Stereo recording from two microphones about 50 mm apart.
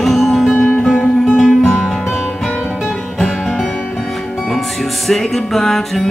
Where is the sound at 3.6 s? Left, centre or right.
Left.